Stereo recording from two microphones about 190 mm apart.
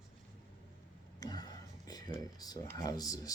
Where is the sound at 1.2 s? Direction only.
20° left (ahead or behind).